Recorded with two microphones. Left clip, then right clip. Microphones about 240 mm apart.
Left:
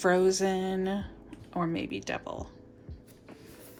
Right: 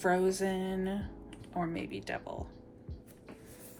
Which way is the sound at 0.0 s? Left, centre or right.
Centre.